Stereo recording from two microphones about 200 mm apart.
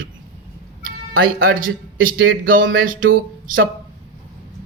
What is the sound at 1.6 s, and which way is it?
Speech, 45° right (ahead or behind).